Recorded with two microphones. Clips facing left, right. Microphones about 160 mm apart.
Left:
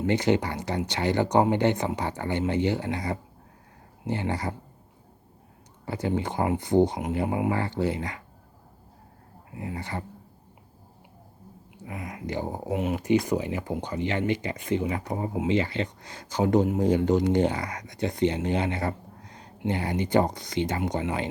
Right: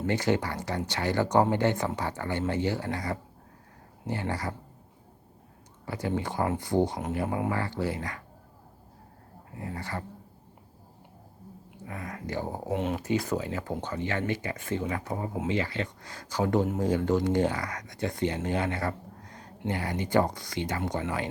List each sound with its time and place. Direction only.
0.0 s speech: 20° left (ahead or behind)
5.8 s speech: 25° left (ahead or behind)
9.6 s speech: 20° left (ahead or behind)
11.9 s speech: 15° left (ahead or behind)